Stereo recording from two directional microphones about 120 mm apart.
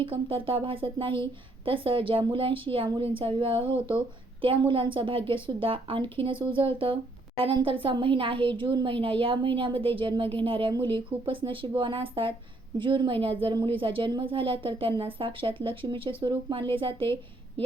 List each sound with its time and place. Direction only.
0.0 s a woman's voice: 50° right (ahead or behind)